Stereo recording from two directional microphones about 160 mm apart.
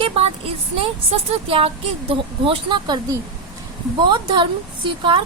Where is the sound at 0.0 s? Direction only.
35° right (ahead or behind).